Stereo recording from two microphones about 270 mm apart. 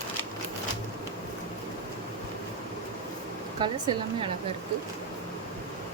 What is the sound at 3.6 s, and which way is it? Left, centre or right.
Speech, centre.